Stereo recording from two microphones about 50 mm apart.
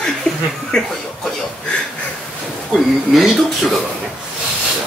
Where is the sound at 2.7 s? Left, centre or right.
Centre.